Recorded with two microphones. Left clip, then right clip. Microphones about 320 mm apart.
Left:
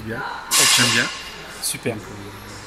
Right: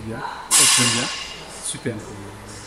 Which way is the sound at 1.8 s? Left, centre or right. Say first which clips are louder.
Left 2 dB; left.